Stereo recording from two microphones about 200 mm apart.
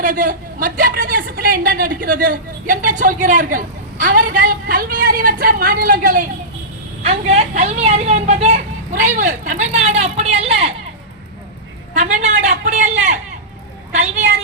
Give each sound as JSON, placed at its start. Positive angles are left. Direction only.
{"t": 0.0, "sound": "a woman's voice", "side_deg": -45}
{"t": 7.0, "sound": "a woman's voice", "side_deg": -30}
{"t": 11.9, "sound": "a sound", "side_deg": -35}